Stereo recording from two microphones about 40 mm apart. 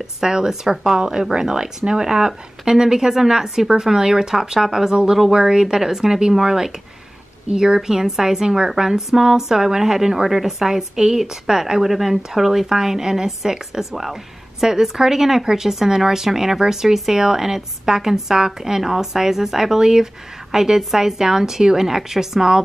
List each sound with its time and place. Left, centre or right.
0.0 s speech: centre